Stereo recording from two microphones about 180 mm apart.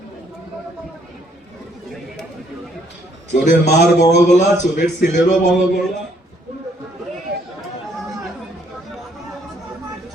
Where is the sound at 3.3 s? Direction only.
45° left (ahead or behind).